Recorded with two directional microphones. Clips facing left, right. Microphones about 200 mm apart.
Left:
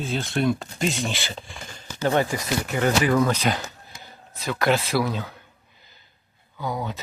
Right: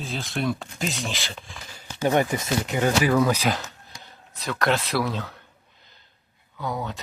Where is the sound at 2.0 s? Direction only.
15° right (ahead or behind).